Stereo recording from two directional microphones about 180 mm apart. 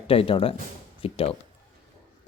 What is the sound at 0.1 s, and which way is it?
Speech, 30° left (ahead or behind).